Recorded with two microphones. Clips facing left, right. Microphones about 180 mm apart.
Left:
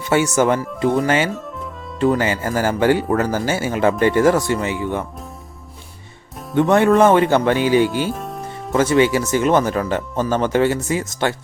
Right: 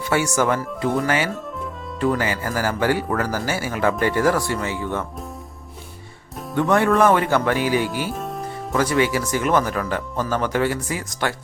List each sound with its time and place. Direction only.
0.0 s speech: 20° left (ahead or behind)
6.5 s speech: 20° left (ahead or behind)
8.1 s music: centre (ahead or behind)
8.7 s speech: 25° left (ahead or behind)